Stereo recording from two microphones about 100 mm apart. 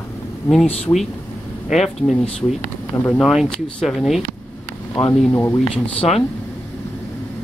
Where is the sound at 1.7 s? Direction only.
Centre (ahead or behind).